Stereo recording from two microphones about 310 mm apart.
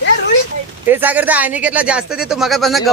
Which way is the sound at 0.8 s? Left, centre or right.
Centre.